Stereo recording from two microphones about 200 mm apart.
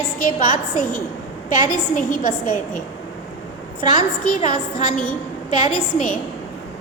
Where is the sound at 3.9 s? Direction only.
40° left (ahead or behind).